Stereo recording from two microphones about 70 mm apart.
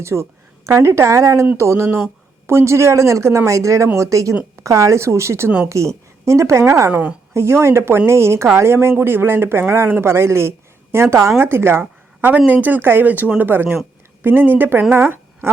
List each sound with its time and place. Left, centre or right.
0.0 s speech: right
6.9 s a woman's voice: centre
7.3 s speech: right
14.9 s a sound: right